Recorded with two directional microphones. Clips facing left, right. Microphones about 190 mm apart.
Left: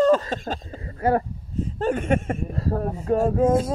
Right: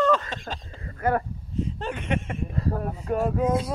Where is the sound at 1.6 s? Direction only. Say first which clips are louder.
Left 6 dB; 45° left (ahead or behind).